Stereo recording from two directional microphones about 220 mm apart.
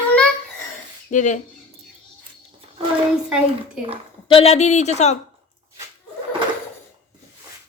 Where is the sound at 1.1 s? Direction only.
35° left (ahead or behind).